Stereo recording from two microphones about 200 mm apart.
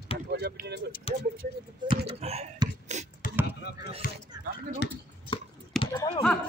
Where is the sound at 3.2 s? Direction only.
40° left (ahead or behind).